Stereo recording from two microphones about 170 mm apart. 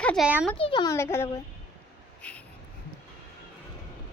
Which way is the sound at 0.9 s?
15° left (ahead or behind).